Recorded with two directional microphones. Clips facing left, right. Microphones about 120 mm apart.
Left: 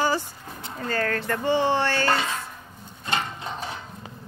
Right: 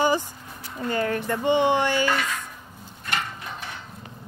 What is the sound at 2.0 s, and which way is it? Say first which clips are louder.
Speech: left 1 dB; 30° left (ahead or behind).